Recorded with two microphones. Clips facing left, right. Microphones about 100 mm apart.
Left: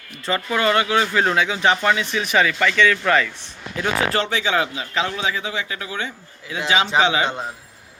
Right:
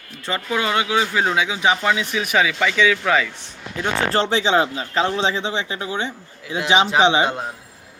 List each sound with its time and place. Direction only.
0.3 s speech: 15° right (ahead or behind)
3.8 s speech: 30° right (ahead or behind)